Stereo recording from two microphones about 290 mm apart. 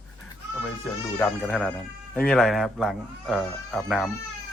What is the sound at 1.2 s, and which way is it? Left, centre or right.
Speech, centre.